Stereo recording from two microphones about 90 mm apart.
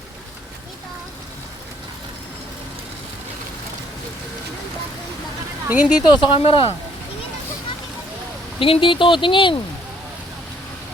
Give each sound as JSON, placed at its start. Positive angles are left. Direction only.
{"t": 5.6, "sound": "speech", "side_deg": -20}
{"t": 6.0, "sound": "speech", "side_deg": 60}
{"t": 8.5, "sound": "speech", "side_deg": 80}